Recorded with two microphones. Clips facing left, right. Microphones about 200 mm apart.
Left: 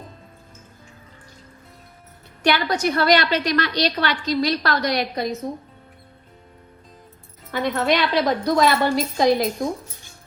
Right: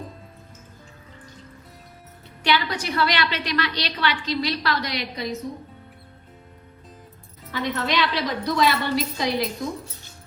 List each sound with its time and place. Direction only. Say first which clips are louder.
2.4 s a woman's voice: left 4 dB; 45° left (ahead or behind)
7.5 s a woman's voice: left 4 dB; 50° left (ahead or behind)